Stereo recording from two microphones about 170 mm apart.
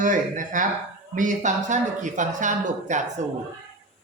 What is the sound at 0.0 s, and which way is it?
Speech, 50° right (ahead or behind).